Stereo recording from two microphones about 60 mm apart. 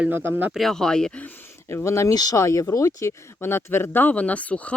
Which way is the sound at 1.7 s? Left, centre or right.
Left.